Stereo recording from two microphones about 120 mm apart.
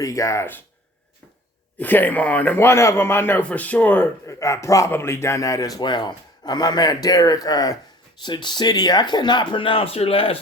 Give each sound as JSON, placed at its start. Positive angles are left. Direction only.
{"t": 0.0, "sound": "a man's voice", "side_deg": 25}
{"t": 1.8, "sound": "a man's voice", "side_deg": 15}